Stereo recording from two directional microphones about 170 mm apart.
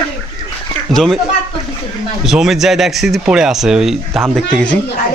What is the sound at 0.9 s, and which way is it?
Speech, centre (ahead or behind).